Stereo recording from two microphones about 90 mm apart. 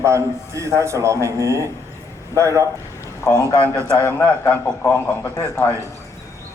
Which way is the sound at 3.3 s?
35° left (ahead or behind).